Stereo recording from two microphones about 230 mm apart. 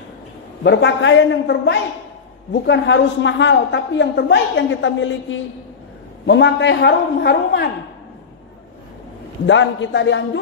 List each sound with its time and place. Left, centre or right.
0.7 s a woman's voice: left
9.5 s a woman's voice: left